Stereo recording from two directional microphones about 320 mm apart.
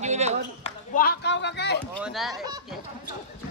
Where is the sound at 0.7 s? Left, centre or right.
Left.